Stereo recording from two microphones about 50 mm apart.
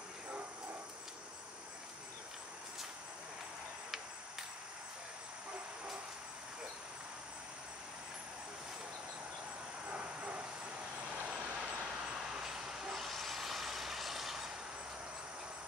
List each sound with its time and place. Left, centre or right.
9.8 s vehicle: right
12.2 s vehicle: centre
12.9 s vehicle: centre